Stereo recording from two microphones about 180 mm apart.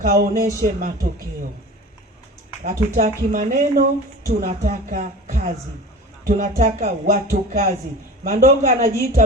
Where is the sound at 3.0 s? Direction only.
40° right (ahead or behind).